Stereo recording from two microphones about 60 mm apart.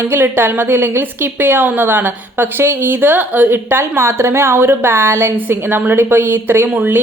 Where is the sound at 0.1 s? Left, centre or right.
Right.